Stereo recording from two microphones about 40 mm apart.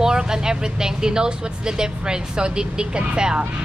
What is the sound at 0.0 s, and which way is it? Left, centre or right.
Speech, centre.